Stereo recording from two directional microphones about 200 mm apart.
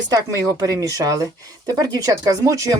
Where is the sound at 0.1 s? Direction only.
15° right (ahead or behind).